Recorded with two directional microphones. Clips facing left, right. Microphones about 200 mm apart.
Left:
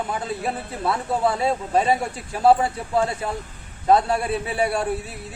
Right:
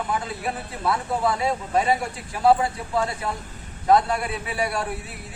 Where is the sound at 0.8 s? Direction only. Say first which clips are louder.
Left 2 dB; 25° left (ahead or behind).